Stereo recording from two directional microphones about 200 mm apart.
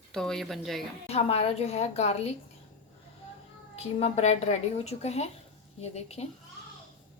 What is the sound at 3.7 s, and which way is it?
Speech, 30° left (ahead or behind).